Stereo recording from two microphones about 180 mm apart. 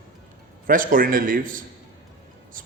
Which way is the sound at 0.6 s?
50° right (ahead or behind).